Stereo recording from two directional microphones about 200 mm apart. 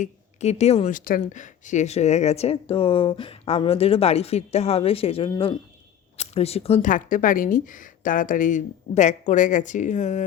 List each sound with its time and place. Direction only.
0.0 s speech: 35° left (ahead or behind)